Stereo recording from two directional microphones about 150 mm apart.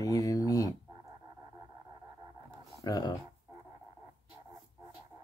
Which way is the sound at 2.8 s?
25° left (ahead or behind).